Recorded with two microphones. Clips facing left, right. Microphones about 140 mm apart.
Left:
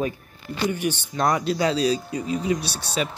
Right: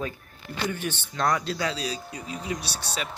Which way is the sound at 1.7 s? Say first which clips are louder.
Left 10 dB; 30° left (ahead or behind).